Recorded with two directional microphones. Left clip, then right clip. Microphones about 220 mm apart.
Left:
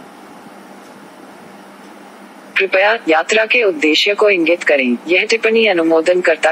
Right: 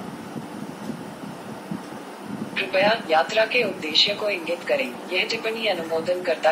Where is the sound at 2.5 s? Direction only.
35° left (ahead or behind).